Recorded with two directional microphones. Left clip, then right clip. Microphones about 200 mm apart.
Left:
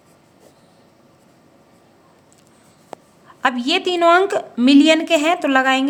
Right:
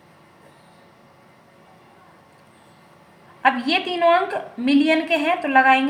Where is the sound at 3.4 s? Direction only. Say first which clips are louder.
Left 1 dB; 55° left (ahead or behind).